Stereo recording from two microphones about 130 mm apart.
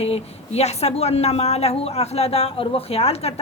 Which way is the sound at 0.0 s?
55° left (ahead or behind).